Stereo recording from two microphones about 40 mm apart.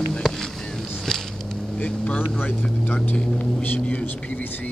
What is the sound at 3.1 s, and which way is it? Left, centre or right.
Speech, centre.